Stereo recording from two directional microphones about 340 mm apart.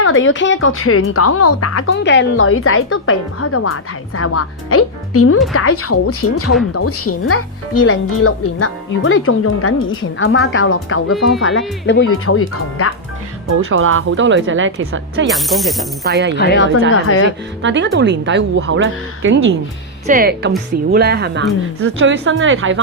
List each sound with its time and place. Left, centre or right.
0.0 s a woman's voice: left
13.5 s a woman's voice: right
15.3 s speech: centre
16.0 s speech: right
16.3 s speech: left
17.6 s a woman's voice: right